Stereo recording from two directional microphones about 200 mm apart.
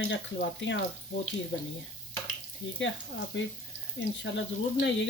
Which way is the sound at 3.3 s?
65° left (ahead or behind).